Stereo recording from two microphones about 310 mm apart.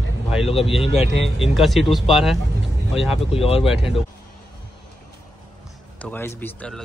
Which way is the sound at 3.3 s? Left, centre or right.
Centre.